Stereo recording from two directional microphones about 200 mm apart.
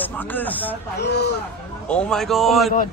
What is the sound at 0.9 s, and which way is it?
Speech, 55° left (ahead or behind).